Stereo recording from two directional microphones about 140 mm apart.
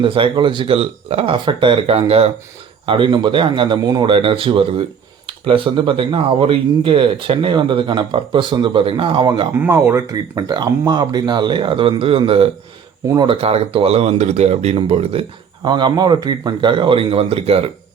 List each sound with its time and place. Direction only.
0.0 s a man's voice: 35° right (ahead or behind)
9.6 s a man's voice: 20° right (ahead or behind); by 15.2 s 45° right (ahead or behind)
15.6 s a man's voice: 30° right (ahead or behind)